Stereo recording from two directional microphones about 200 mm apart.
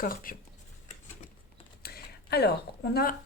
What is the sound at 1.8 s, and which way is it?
Computer keyboard, 50° left (ahead or behind).